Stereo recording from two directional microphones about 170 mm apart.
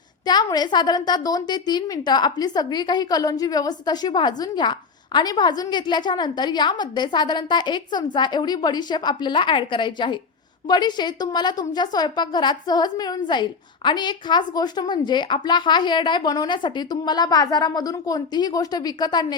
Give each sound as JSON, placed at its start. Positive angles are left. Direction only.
{"t": 0.3, "sound": "a woman's voice", "side_deg": 25}